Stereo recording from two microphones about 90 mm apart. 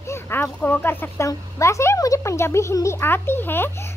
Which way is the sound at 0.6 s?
20° left (ahead or behind).